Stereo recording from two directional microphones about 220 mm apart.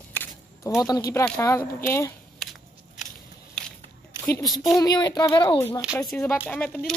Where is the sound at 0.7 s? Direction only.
15° left (ahead or behind).